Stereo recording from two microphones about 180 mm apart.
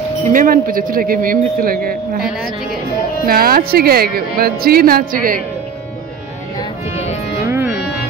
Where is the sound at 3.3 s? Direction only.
55° right (ahead or behind).